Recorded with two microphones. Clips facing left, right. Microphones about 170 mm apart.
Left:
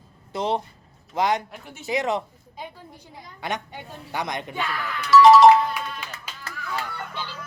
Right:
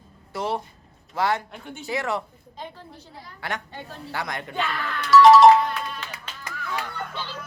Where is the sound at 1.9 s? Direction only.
20° left (ahead or behind).